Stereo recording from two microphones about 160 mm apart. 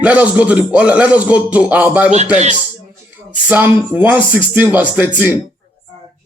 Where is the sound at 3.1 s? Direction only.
10° right (ahead or behind).